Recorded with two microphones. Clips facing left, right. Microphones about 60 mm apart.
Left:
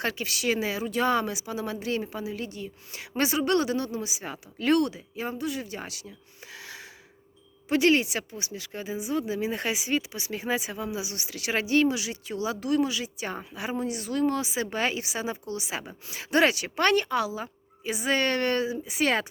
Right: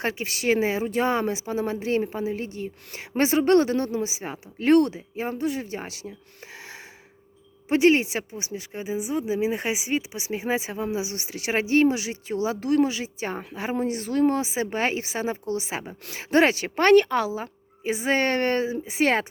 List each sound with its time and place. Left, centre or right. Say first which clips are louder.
0.0 s speech: right 2 dB; right
7.7 s speech: right 3 dB; right